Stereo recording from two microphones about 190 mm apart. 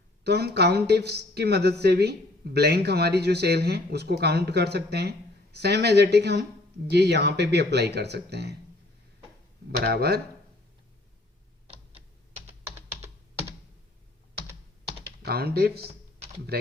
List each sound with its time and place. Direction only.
0.3 s speech: 60° right (ahead or behind)
9.8 s speech: 55° right (ahead or behind)
11.7 s tick-tock: 30° right (ahead or behind)
15.2 s speech: 55° right (ahead or behind)